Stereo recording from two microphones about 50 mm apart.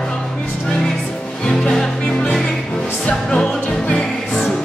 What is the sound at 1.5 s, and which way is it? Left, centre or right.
Music, centre.